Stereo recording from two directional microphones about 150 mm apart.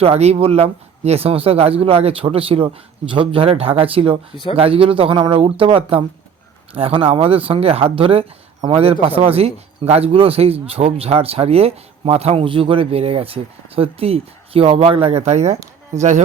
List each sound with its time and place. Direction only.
0.0 s speech: 45° right (ahead or behind)